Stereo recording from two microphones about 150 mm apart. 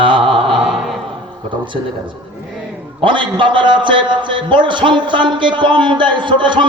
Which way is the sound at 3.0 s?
35° right (ahead or behind).